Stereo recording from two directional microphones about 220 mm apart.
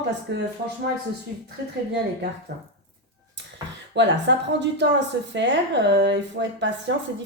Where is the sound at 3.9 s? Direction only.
55° right (ahead or behind).